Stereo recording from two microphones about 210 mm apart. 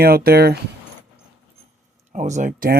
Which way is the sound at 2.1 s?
35° right (ahead or behind).